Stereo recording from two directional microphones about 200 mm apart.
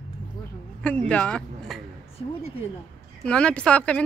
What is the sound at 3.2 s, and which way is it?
Speech, 5° left (ahead or behind).